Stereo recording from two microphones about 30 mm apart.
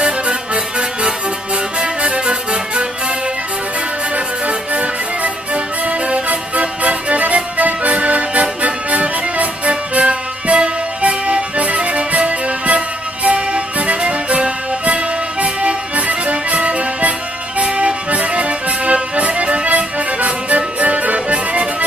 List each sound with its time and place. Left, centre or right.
0.0 s music: right
4.5 s music: right